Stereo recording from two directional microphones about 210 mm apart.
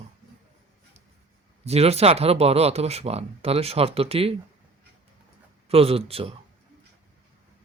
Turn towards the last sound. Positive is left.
turn(degrees=-30)  # may be behind; listen again after turning